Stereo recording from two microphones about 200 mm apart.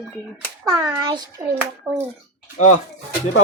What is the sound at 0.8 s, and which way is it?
Speech, 10° right (ahead or behind).